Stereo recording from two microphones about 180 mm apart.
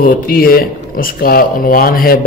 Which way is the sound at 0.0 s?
50° left (ahead or behind).